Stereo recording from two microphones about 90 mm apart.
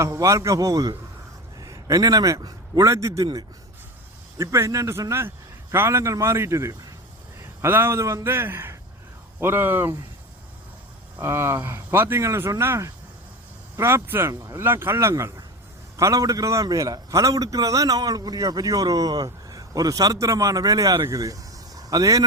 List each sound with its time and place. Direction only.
0.0 s a man's voice: 35° right (ahead or behind)
1.5 s a sound: 40° right (ahead or behind)
2.4 s a man's voice: 40° right (ahead or behind)
4.4 s a man's voice: 35° right (ahead or behind)
11.2 s a man's voice: 30° right (ahead or behind)